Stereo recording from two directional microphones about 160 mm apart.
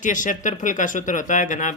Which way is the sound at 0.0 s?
55° left (ahead or behind).